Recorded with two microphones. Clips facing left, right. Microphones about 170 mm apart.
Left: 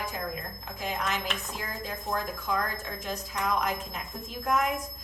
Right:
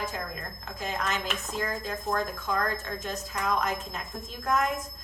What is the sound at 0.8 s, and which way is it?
Speech, 10° left (ahead or behind).